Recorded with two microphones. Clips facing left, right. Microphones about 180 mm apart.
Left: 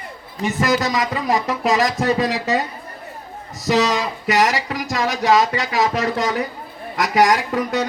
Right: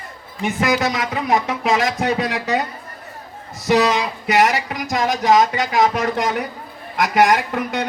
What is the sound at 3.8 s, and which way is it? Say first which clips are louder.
Speech: right 1 dB; 55° right (ahead or behind).